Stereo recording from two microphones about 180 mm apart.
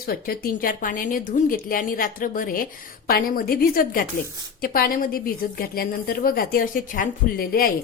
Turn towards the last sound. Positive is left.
turn(degrees=55)  # may be behind; listen again after turning